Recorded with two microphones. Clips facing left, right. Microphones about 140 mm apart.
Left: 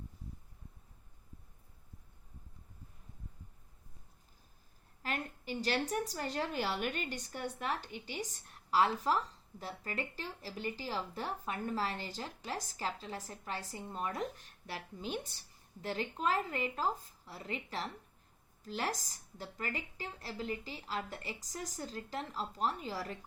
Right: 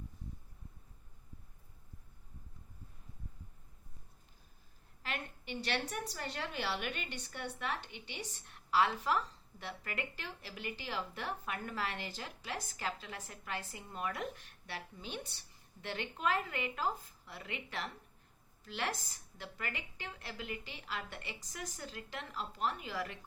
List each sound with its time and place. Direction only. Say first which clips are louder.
5.0 s a woman's voice: left 4 dB; 40° left (ahead or behind)